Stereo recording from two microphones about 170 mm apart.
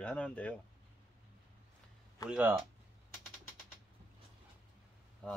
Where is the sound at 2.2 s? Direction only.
20° left (ahead or behind).